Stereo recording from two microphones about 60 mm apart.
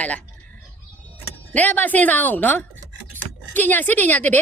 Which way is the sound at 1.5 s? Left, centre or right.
Left.